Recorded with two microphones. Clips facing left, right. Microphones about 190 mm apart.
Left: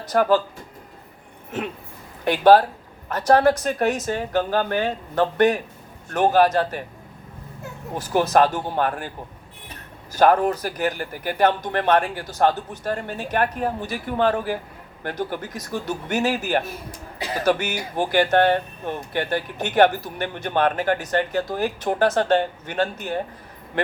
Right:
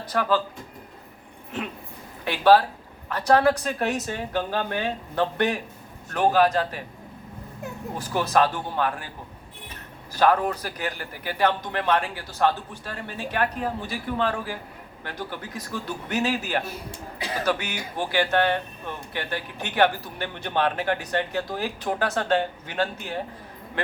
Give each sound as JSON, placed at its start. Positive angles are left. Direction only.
{"t": 0.0, "sound": "speech", "side_deg": 45}
{"t": 2.2, "sound": "speech", "side_deg": 45}
{"t": 8.1, "sound": "speech", "side_deg": 45}
{"t": 10.2, "sound": "speech", "side_deg": 45}